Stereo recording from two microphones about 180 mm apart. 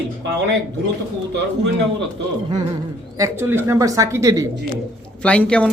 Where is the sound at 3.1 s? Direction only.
15° right (ahead or behind).